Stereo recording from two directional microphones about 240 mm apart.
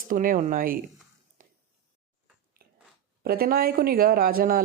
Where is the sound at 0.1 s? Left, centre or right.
Right.